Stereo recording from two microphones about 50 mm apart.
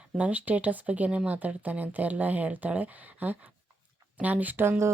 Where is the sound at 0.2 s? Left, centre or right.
Right.